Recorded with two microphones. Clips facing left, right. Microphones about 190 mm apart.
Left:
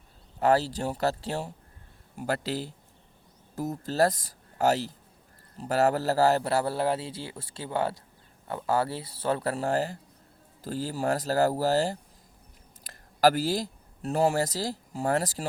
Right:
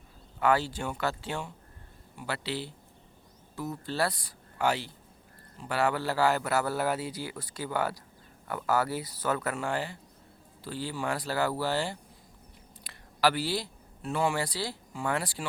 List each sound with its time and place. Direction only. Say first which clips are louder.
0.3 s a man's voice: left 3 dB; 40° left (ahead or behind)